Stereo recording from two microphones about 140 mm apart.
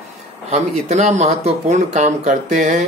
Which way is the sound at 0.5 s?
55° right (ahead or behind).